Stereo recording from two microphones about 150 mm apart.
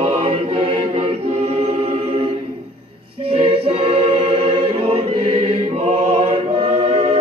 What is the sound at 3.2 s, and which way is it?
Choir, 40° right (ahead or behind).